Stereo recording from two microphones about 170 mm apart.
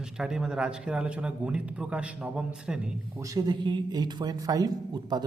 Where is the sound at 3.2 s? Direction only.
25° right (ahead or behind).